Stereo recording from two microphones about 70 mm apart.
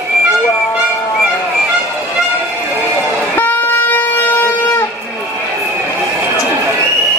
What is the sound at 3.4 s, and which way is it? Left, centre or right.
Shofar, left.